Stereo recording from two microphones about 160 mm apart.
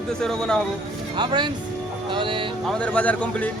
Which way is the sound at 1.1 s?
25° right (ahead or behind).